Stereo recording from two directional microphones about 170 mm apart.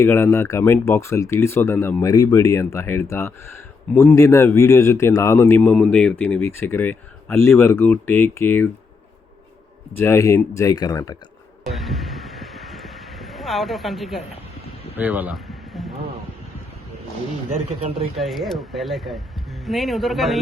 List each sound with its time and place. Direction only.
0.0 s speech: 15° left (ahead or behind)
10.0 s speech: 15° left (ahead or behind)
11.7 s a sound: centre (ahead or behind)
14.9 s speech: 10° right (ahead or behind)
15.4 s a sound: centre (ahead or behind)
18.2 s speech: centre (ahead or behind)